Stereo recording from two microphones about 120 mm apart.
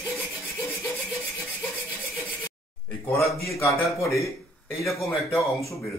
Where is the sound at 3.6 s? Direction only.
25° left (ahead or behind).